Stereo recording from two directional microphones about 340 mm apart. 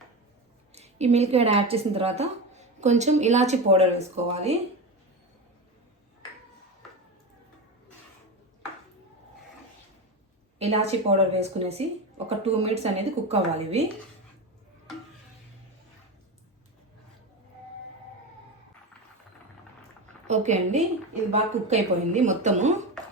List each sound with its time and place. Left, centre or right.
0.7 s a woman's voice: centre
10.6 s speech: centre
20.2 s a woman's voice: centre